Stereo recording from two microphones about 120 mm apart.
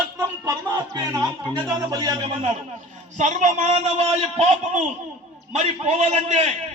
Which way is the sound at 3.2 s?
90° right.